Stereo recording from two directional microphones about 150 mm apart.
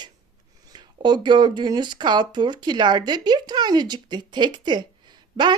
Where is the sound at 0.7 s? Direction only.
30° right (ahead or behind).